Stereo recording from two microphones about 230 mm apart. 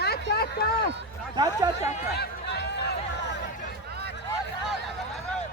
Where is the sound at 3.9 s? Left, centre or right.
Right.